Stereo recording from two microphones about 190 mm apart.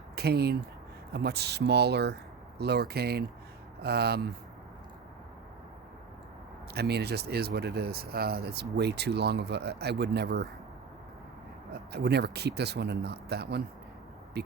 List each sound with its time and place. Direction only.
0.2 s speech: 55° right (ahead or behind)
6.7 s speech: 60° right (ahead or behind)
11.7 s speech: 60° right (ahead or behind)